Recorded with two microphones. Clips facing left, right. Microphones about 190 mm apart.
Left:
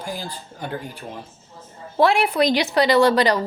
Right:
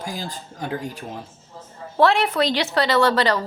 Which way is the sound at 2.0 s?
10° left (ahead or behind).